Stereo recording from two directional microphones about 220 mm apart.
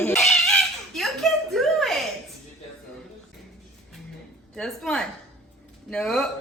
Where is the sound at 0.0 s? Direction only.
5° left (ahead or behind).